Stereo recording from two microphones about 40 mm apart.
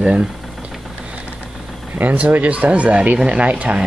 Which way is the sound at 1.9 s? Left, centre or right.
Right.